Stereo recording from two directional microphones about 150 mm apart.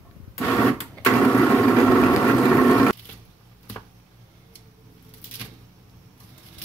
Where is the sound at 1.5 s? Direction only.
Centre (ahead or behind).